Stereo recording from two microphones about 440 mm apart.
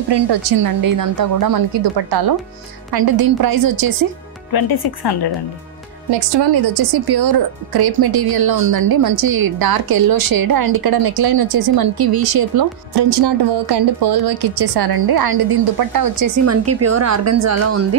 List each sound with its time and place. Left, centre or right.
0.1 s a woman's voice: right
4.5 s speech: left
6.0 s a woman's voice: right
16.4 s a woman's voice: right